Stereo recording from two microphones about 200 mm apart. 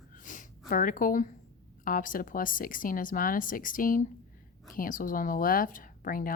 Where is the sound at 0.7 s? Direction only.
45° left (ahead or behind).